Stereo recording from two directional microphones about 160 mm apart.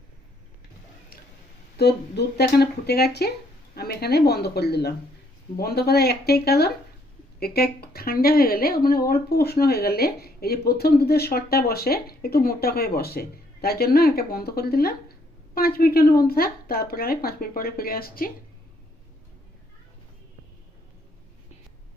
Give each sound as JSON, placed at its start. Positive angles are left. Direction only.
{"t": 1.8, "sound": "speech", "side_deg": 90}
{"t": 5.5, "sound": "speech", "side_deg": 75}